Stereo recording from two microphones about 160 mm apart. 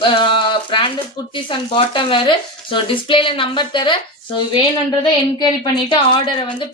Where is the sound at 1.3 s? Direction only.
30° left (ahead or behind).